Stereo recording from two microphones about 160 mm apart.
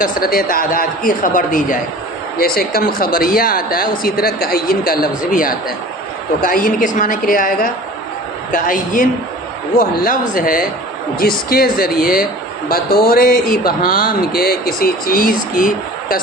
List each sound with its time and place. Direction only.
0.0 s speech: 65° left (ahead or behind)
2.4 s speech: 70° left (ahead or behind)